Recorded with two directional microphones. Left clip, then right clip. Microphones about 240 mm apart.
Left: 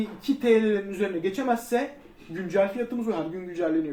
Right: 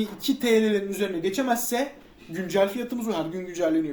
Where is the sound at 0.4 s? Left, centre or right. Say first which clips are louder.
Even; right.